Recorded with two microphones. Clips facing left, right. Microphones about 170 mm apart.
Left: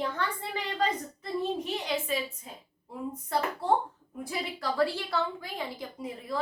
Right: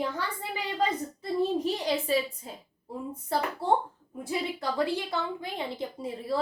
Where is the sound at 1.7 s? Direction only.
35° right (ahead or behind).